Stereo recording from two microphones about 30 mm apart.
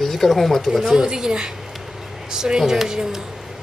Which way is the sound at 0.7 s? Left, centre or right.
Centre.